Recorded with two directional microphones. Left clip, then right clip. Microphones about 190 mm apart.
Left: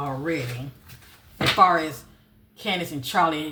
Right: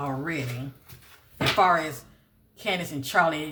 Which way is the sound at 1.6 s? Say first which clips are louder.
Left 3 dB; 30° right (ahead or behind).